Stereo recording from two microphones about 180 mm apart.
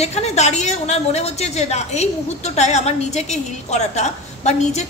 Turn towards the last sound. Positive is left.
turn(degrees=40)  # may be behind; listen again after turning